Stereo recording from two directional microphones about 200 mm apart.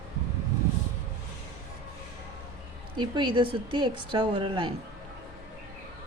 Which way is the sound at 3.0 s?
25° right (ahead or behind).